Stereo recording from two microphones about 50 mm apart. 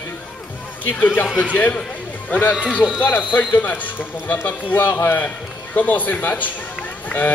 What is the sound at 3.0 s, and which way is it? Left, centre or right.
Speech, left.